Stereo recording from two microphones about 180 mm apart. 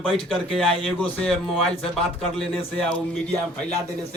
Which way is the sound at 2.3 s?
Centre (ahead or behind).